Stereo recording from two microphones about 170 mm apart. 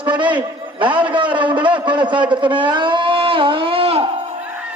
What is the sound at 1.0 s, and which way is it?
A man's voice, 30° right (ahead or behind).